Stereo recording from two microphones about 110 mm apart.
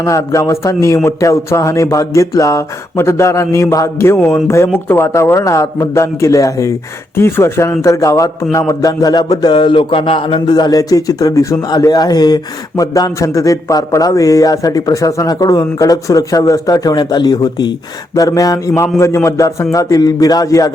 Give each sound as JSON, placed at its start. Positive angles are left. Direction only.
{"t": 0.0, "sound": "a man's voice", "side_deg": 30}
{"t": 10.5, "sound": "speech", "side_deg": 35}